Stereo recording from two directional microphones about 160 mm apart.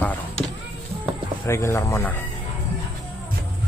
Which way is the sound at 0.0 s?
10° left (ahead or behind).